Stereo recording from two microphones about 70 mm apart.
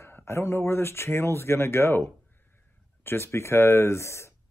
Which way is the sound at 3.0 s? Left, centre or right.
Left.